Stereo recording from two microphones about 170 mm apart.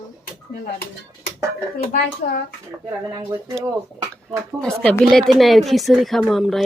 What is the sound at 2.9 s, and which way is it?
Speech, 20° right (ahead or behind).